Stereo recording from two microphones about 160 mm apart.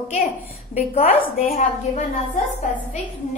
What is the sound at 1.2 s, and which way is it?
Speech, 65° left (ahead or behind).